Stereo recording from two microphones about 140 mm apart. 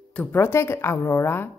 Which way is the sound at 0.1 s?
15° left (ahead or behind).